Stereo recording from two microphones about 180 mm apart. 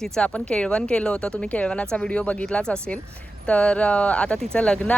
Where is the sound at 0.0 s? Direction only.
5° left (ahead or behind).